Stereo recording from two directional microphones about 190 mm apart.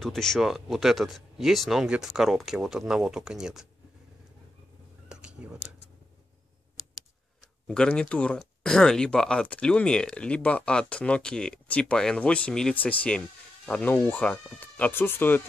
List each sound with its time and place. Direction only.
0.0 s speech: centre (ahead or behind)
5.0 s a sound: 5° right (ahead or behind)
7.6 s speech: 5° left (ahead or behind)